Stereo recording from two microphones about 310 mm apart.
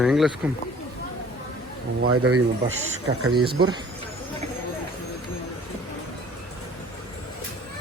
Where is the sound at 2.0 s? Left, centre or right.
Right.